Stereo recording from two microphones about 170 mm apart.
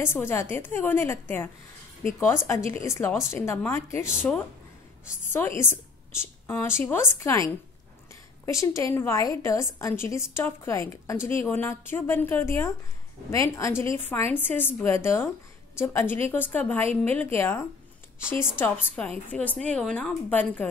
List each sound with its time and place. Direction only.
0.0 s a woman's voice: 15° left (ahead or behind)
4.1 s speech: 5° right (ahead or behind)
5.2 s a woman's voice: 15° left (ahead or behind)